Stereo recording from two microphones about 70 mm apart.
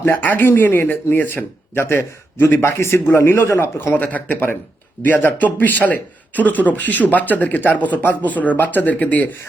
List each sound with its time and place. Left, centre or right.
0.0 s a man's voice: left